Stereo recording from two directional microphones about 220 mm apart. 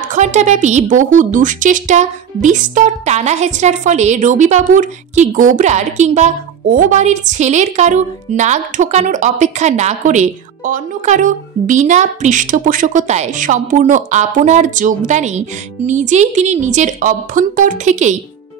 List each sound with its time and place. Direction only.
0.1 s a woman's voice: 35° right (ahead or behind)